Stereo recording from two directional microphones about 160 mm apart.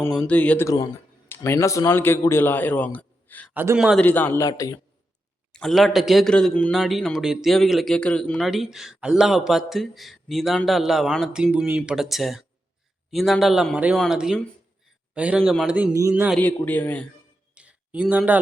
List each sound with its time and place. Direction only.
0.1 s a man's voice: 5° left (ahead or behind)
3.5 s a man's voice: 10° right (ahead or behind)
3.9 s a man's voice: 10° left (ahead or behind)
5.5 s a man's voice: centre (ahead or behind); by 16.3 s 15° right (ahead or behind)
16.4 s a man's voice: 10° left (ahead or behind)
17.5 s a sound: 10° right (ahead or behind)